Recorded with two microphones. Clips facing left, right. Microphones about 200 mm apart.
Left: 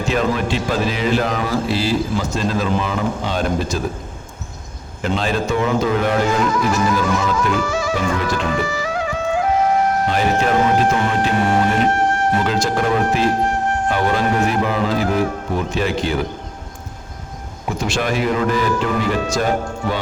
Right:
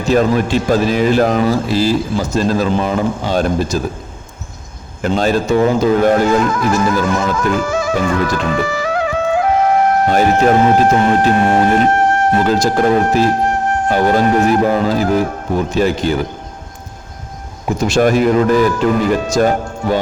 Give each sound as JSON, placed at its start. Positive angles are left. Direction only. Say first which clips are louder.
{"t": 0.1, "sound": "a man's voice", "louder": "right 7 dB", "side_deg": -40}
{"t": 5.0, "sound": "speech", "louder": "right 5 dB", "side_deg": -45}
{"t": 10.2, "sound": "a man's voice", "louder": "right 6 dB", "side_deg": -45}
{"t": 17.7, "sound": "speech", "louder": "right 8 dB", "side_deg": -40}